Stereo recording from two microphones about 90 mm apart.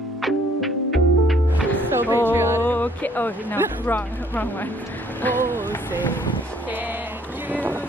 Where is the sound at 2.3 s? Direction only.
25° right (ahead or behind).